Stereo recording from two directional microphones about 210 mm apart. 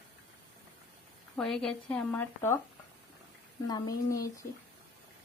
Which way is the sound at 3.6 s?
20° left (ahead or behind).